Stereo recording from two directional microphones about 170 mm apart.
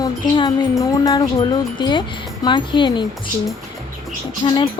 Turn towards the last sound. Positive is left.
turn(degrees=30)  # may be behind; listen again after turning